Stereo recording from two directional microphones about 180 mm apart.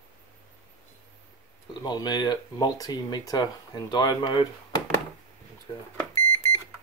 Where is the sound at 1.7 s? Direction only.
25° left (ahead or behind).